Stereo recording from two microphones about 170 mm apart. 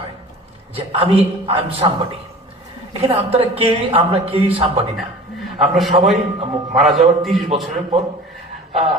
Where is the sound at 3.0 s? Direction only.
35° right (ahead or behind).